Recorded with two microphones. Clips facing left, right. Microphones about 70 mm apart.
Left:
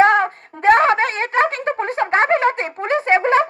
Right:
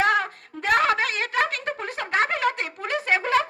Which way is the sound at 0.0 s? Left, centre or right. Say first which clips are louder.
Left 8 dB; left.